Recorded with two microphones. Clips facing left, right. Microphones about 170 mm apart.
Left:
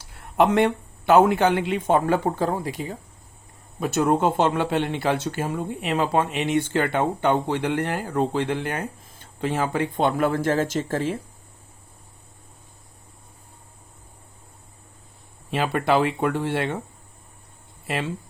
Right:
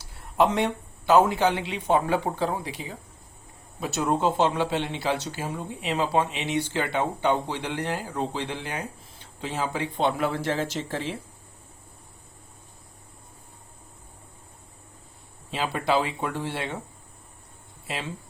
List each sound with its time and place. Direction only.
0.1 s speech: 60° left (ahead or behind)
15.4 s speech: 60° left (ahead or behind)
17.8 s speech: 55° left (ahead or behind)